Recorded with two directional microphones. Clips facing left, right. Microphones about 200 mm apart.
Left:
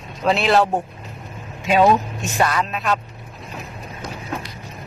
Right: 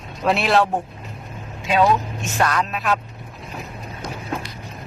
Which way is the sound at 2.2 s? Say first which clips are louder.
Left 1 dB; 10° left (ahead or behind).